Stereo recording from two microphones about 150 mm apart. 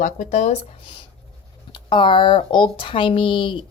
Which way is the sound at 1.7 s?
35° left (ahead or behind).